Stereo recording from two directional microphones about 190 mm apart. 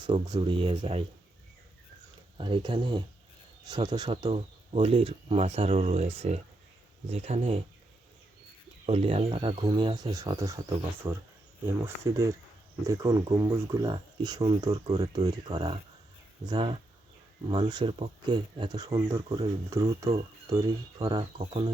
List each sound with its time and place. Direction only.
0.0 s speech: 20° right (ahead or behind)
2.4 s speech: 25° right (ahead or behind)
8.9 s speech: 30° right (ahead or behind)
11.6 s speech: 15° right (ahead or behind)